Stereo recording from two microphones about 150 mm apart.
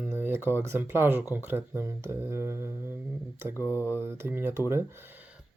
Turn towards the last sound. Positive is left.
turn(degrees=-15)  # may be behind; listen again after turning